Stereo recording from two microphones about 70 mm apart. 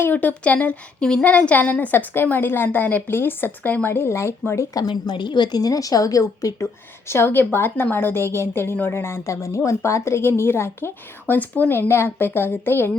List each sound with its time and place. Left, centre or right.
0.0 s a woman's voice: left
4.7 s a woman's voice: left
7.1 s a woman's voice: left